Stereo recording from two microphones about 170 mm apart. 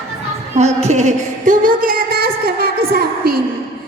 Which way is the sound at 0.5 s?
40° right (ahead or behind).